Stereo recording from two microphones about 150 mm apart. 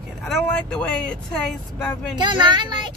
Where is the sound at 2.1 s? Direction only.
30° right (ahead or behind).